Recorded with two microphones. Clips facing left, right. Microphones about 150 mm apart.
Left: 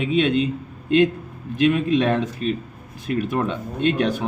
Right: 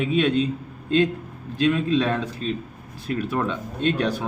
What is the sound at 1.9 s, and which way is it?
A man's voice, 20° left (ahead or behind).